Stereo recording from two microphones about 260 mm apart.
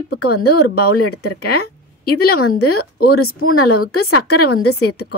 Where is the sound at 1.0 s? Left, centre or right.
Left.